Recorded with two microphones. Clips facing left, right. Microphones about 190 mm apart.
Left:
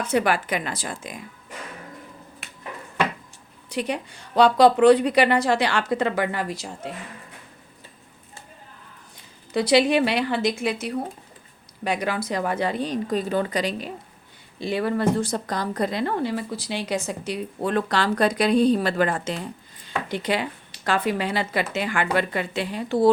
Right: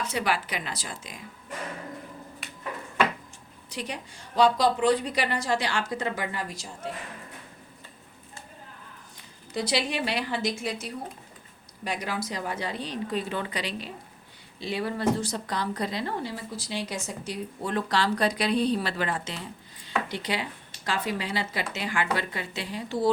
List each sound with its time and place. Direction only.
0.0 s a woman's voice: 50° left (ahead or behind)
3.7 s a woman's voice: 60° left (ahead or behind)
9.6 s a woman's voice: 65° left (ahead or behind)